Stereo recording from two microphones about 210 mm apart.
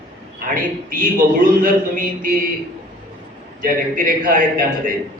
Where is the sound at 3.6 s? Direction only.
40° right (ahead or behind).